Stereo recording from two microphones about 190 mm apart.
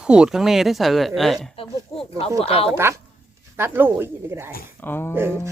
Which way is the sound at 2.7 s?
15° right (ahead or behind).